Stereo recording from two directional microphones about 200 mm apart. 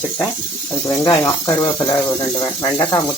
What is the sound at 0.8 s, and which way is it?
Speech, 20° left (ahead or behind).